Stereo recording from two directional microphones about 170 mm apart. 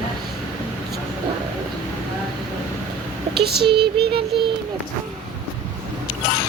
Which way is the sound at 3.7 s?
30° right (ahead or behind).